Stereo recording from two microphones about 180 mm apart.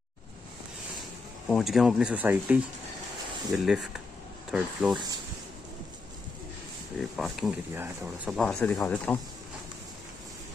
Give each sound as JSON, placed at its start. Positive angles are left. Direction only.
{"t": 1.5, "sound": "speech", "side_deg": 0}
{"t": 7.0, "sound": "speech", "side_deg": 0}
{"t": 7.7, "sound": "speech", "side_deg": -10}
{"t": 8.3, "sound": "speech", "side_deg": 5}